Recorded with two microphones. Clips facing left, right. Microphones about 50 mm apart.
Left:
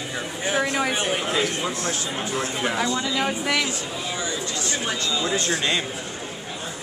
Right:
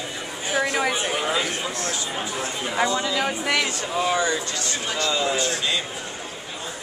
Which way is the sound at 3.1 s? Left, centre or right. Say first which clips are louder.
Even; centre.